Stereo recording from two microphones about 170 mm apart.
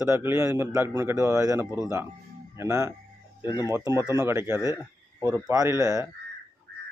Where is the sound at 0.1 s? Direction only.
15° right (ahead or behind).